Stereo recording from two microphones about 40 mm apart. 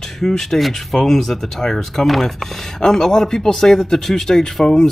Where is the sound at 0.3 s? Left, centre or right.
Centre.